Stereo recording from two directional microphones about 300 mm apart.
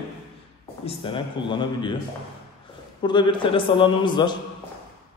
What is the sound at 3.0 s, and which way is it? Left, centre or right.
A man's voice, centre.